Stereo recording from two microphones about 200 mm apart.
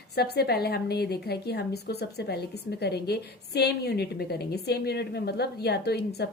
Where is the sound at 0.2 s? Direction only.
55° left (ahead or behind).